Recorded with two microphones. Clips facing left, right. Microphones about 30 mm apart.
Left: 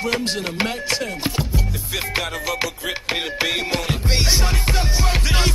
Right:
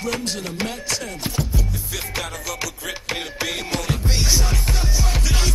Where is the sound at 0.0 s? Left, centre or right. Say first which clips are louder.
Left 3 dB; left.